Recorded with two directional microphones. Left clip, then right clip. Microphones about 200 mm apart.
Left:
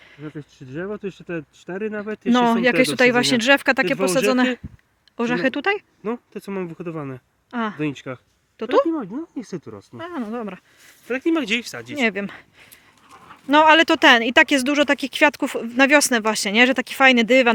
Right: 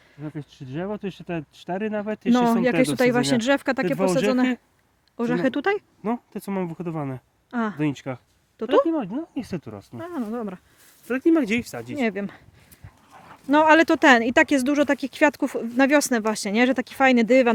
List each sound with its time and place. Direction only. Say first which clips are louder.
0.2 s speech: even; 50° right (ahead or behind)
2.3 s speech: left 3 dB; 5° right (ahead or behind)
5.1 s speech: left 2 dB; centre (ahead or behind)
6.0 s speech: even; 65° right (ahead or behind)
7.5 s speech: left 2 dB; 10° right (ahead or behind)
7.8 s speech: even; 60° right (ahead or behind)
8.5 s speech: left 1 dB; 10° right (ahead or behind)
8.9 s speech: even; 50° right (ahead or behind)
10.0 s speech: left 1 dB; 5° right (ahead or behind)
11.1 s speech: even; 60° right (ahead or behind); by 11.9 s 40° right (ahead or behind)
11.9 s speech: left 5 dB; centre (ahead or behind)